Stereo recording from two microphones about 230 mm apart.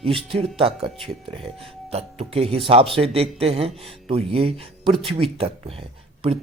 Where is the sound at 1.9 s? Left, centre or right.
Right.